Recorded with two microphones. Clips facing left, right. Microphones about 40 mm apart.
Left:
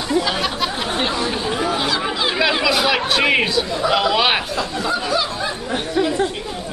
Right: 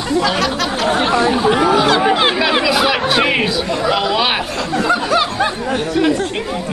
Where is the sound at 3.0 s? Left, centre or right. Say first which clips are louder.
Right 2 dB; centre.